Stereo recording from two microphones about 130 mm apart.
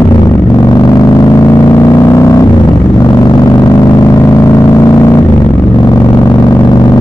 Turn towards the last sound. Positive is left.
turn(degrees=30)  # may be behind; listen again after turning